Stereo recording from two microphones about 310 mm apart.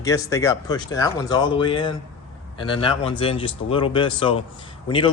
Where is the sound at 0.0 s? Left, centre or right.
Centre.